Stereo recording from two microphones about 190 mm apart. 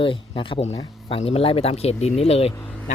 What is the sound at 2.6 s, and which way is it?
Vehicle, 10° left (ahead or behind).